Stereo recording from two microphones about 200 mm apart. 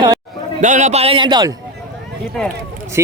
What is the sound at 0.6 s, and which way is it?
Speech, 35° right (ahead or behind).